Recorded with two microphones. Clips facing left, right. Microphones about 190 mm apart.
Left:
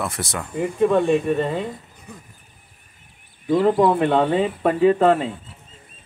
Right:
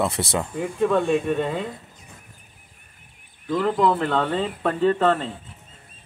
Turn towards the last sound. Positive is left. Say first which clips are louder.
# left 4 dB
turn(degrees=10)  # may be behind; listen again after turning